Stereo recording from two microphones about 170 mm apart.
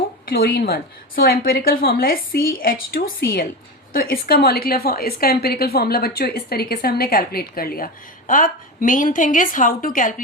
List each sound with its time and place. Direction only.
0.3 s a woman's voice: 60° left (ahead or behind)